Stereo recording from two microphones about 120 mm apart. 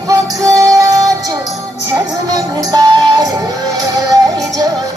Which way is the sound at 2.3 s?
35° right (ahead or behind).